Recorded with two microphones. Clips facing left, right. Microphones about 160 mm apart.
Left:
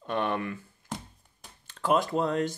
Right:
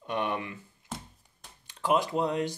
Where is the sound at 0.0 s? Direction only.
15° right (ahead or behind).